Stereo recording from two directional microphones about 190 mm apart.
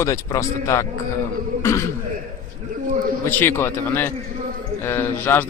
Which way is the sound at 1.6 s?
15° left (ahead or behind).